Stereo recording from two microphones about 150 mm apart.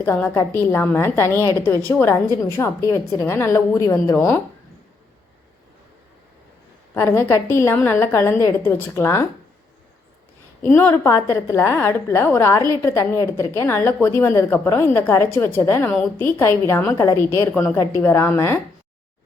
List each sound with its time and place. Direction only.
0.0 s a woman's voice: 15° left (ahead or behind)
6.9 s a woman's voice: 15° left (ahead or behind)
10.7 s a woman's voice: 15° left (ahead or behind)